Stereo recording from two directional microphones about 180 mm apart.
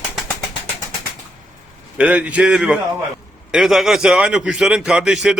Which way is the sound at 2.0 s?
5° right (ahead or behind).